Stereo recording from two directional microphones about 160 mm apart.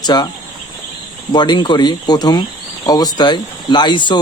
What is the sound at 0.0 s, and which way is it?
Speech, 25° left (ahead or behind).